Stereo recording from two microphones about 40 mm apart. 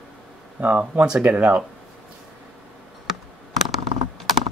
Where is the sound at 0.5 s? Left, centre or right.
Right.